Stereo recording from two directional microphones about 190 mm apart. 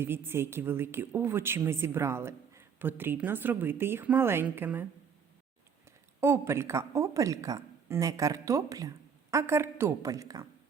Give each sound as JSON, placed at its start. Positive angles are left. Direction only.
{"t": 0.0, "sound": "a woman's voice", "side_deg": -10}
{"t": 6.1, "sound": "a woman's voice", "side_deg": -15}